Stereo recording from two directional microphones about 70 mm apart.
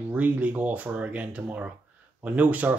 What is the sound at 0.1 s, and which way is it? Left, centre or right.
Speech, right.